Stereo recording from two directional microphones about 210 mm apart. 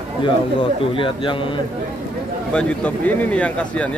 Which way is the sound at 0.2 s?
25° left (ahead or behind).